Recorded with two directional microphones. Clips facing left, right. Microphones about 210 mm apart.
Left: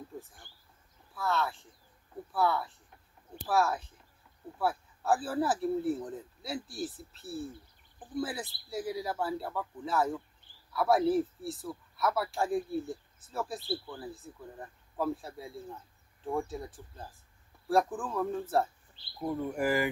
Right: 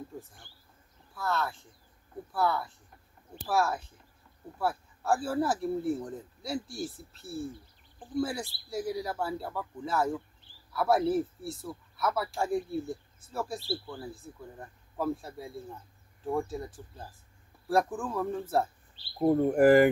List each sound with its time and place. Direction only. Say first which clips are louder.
1.1 s speech: even; centre (ahead or behind)
19.1 s speech: right 9 dB; 50° right (ahead or behind)